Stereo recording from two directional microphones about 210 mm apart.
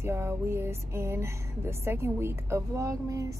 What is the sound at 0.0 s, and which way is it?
A woman's voice, 10° right (ahead or behind).